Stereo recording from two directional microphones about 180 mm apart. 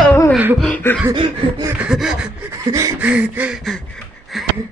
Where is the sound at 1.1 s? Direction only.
25° right (ahead or behind).